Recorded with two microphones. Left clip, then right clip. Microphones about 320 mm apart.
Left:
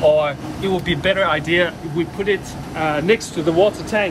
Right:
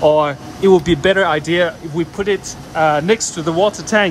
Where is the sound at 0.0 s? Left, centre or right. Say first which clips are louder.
Right 2 dB; right.